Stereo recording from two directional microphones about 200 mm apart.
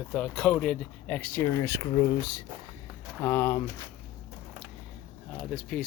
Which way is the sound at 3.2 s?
10° left (ahead or behind).